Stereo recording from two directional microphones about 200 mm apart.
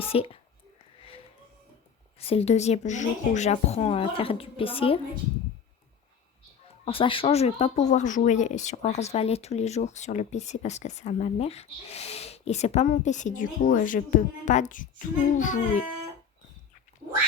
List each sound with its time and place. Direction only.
0.1 s speech: 30° left (ahead or behind)
2.1 s speech: 30° left (ahead or behind)
6.8 s speech: 25° left (ahead or behind)